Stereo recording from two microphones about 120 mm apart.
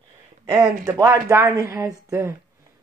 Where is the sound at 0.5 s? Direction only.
30° right (ahead or behind).